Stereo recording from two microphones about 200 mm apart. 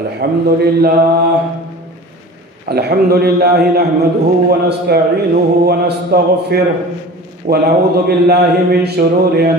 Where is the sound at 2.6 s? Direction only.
50° right (ahead or behind).